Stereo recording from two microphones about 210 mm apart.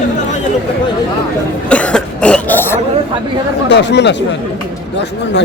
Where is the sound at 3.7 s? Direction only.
55° left (ahead or behind).